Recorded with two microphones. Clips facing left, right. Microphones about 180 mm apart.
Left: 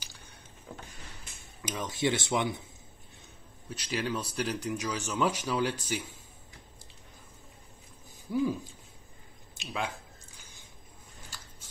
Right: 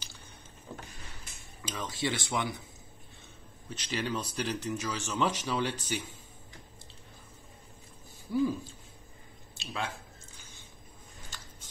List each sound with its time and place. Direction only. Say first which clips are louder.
1.6 s speech: left 3 dB; 20° left (ahead or behind)
3.7 s speech: left 1 dB; 10° left (ahead or behind)
8.3 s speech: even; 10° left (ahead or behind)
9.6 s speech: left 2 dB; 15° left (ahead or behind)
11.3 s biting: even; 10° left (ahead or behind)